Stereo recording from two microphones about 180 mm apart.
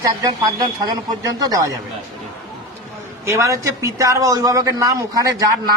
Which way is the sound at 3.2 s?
15° right (ahead or behind).